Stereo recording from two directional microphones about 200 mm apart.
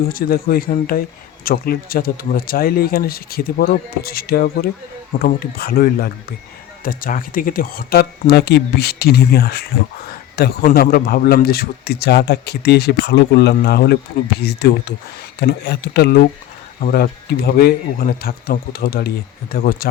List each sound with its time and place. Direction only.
0.1 s a man's voice: 45° left (ahead or behind)